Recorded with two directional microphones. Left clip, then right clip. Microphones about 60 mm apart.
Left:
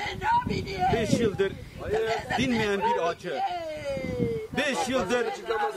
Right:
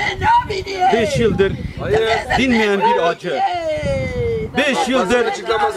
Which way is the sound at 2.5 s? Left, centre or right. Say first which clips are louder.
Right 11 dB; centre.